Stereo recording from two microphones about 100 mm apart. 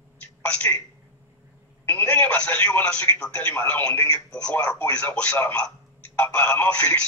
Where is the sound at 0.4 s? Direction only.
15° left (ahead or behind).